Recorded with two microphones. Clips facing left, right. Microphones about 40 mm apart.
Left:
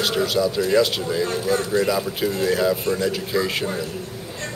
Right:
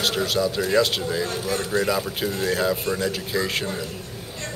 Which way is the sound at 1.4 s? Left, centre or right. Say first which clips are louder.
Left 4 dB; left.